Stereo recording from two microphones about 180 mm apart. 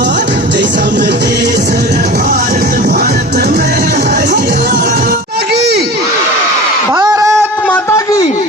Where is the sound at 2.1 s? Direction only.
50° right (ahead or behind); by 6.0 s 65° right (ahead or behind).